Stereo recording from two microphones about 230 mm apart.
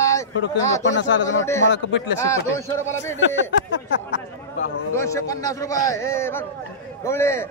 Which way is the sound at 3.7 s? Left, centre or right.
Left.